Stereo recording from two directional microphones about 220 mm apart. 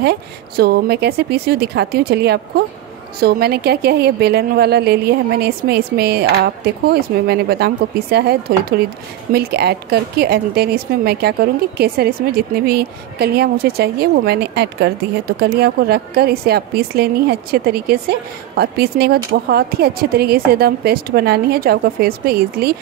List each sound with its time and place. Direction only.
0.0 s a woman's voice: 45° right (ahead or behind)